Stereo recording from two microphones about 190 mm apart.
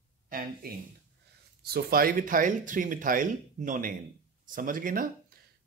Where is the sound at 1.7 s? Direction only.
50° right (ahead or behind).